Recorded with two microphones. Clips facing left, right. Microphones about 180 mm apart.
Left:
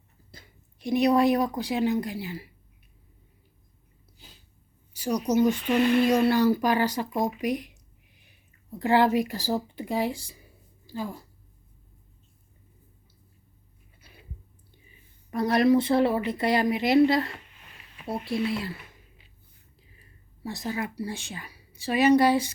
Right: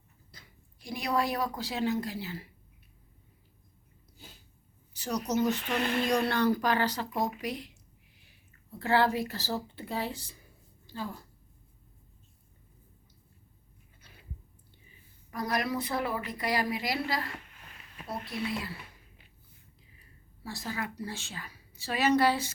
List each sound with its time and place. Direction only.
0.3 s speech: 25° left (ahead or behind)
4.9 s a woman's voice: 10° left (ahead or behind)
14.8 s speech: 25° left (ahead or behind)
20.4 s speech: 20° left (ahead or behind)